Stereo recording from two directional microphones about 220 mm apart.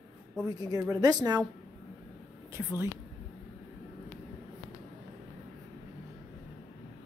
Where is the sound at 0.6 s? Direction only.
15° right (ahead or behind).